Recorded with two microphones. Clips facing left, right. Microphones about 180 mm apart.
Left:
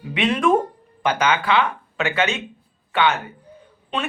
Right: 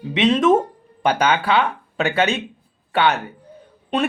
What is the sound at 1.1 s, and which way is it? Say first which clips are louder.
Speech: right 2 dB; 35° right (ahead or behind).